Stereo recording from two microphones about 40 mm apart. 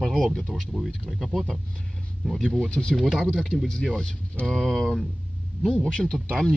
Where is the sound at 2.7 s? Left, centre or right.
Left.